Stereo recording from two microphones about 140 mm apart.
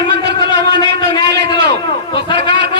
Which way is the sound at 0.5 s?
30° left (ahead or behind).